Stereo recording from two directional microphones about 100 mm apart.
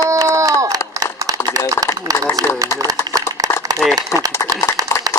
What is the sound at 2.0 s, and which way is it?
Speech, 35° right (ahead or behind).